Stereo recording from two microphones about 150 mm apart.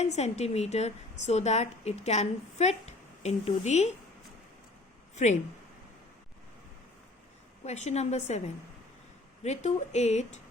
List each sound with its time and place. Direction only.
0.0 s a woman's voice: 45° left (ahead or behind)
5.1 s speech: 50° left (ahead or behind)
7.6 s a woman's voice: 45° left (ahead or behind)
9.4 s a woman's voice: 50° left (ahead or behind)